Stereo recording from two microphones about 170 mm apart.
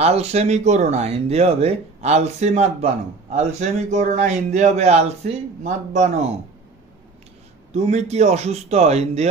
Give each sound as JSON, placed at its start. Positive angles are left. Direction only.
{"t": 0.0, "sound": "a man's voice", "side_deg": -40}
{"t": 7.7, "sound": "speech", "side_deg": -40}